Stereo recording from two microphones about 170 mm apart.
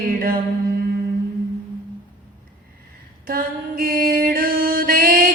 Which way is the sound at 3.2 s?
60° right (ahead or behind).